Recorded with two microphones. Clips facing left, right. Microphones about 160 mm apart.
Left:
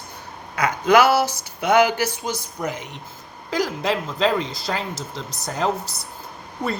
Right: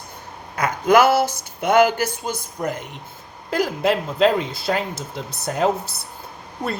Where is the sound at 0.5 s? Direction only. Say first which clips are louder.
Right 1 dB; 50° right (ahead or behind).